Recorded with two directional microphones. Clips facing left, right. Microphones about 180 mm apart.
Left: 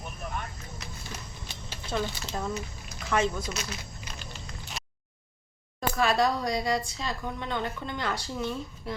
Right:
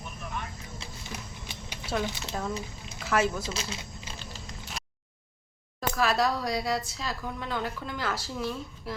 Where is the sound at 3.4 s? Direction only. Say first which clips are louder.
Even; 30° right (ahead or behind).